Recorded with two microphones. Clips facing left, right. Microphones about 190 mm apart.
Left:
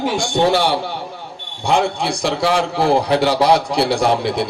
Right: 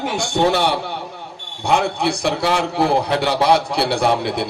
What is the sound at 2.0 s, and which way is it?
A man's voice, 60° right (ahead or behind).